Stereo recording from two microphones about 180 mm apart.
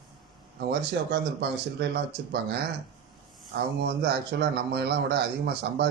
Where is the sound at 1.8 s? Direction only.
60° right (ahead or behind).